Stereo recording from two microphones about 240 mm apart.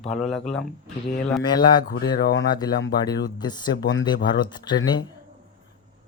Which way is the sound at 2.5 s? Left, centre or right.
Centre.